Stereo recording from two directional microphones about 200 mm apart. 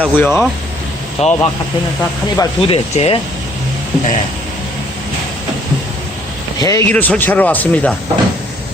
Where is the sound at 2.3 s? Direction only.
30° left (ahead or behind).